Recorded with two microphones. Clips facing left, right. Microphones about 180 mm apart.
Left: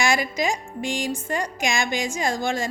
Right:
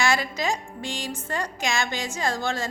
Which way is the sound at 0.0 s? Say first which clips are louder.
Left 2 dB; 15° left (ahead or behind).